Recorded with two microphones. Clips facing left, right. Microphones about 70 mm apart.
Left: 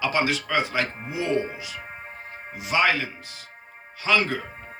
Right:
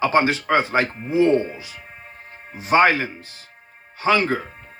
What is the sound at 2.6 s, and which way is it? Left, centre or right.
Speech, right.